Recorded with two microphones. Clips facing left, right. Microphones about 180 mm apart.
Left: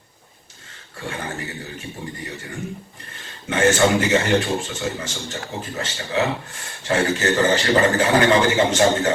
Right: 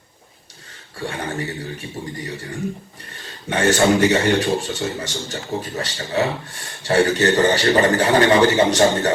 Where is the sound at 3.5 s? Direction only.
35° right (ahead or behind).